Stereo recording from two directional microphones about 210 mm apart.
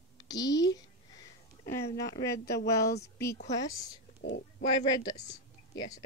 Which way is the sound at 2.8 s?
50° left (ahead or behind).